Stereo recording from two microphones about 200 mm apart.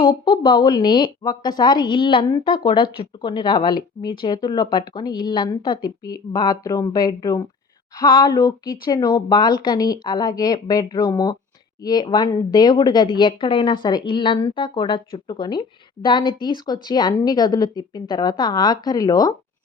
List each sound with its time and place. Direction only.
0.0 s speech: 20° left (ahead or behind)